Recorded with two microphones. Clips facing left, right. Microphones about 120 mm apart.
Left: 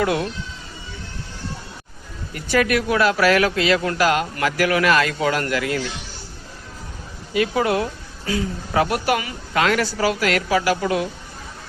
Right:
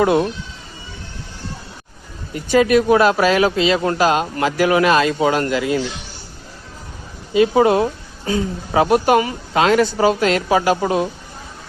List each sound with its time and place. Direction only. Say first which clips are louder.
0.0 s speech: right 6 dB; 25° right (ahead or behind)
2.3 s speech: right 6 dB; 20° right (ahead or behind)
7.3 s speech: right 6 dB; 25° right (ahead or behind)